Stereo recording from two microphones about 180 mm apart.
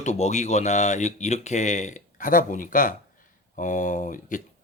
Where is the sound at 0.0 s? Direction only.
40° left (ahead or behind).